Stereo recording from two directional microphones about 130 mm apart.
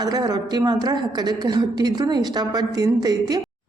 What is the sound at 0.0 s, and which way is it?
A woman's voice, 30° right (ahead or behind).